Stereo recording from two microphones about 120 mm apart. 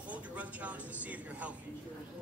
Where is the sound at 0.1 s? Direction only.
10° right (ahead or behind).